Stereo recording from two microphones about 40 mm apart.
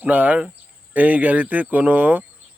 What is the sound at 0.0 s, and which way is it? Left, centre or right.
A man's voice, right.